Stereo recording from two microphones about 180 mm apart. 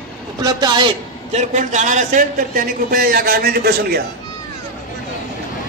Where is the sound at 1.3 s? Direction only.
40° right (ahead or behind); by 4.0 s 60° right (ahead or behind).